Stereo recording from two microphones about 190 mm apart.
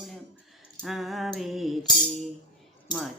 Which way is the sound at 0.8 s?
Centre (ahead or behind).